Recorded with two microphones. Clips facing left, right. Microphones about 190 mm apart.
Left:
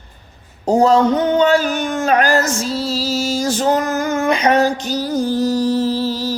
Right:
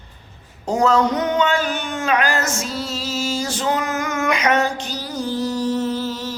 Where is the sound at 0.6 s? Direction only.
30° left (ahead or behind).